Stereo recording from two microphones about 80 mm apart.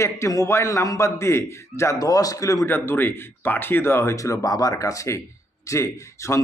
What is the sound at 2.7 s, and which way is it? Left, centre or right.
A man's voice, left.